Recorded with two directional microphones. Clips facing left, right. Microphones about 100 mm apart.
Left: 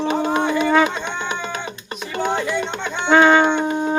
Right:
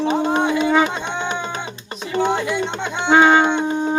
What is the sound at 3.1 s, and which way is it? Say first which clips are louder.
Music: even; 15° right (ahead or behind).